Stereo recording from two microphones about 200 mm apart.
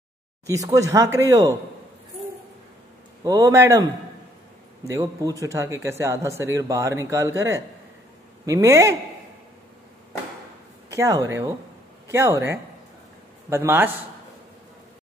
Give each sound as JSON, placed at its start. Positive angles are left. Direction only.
{"t": 0.7, "sound": "speech", "side_deg": -15}
{"t": 3.3, "sound": "speech", "side_deg": -15}
{"t": 10.9, "sound": "speech", "side_deg": -15}